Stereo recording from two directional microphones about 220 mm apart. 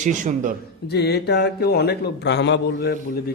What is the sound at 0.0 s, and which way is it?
Speech, 35° right (ahead or behind).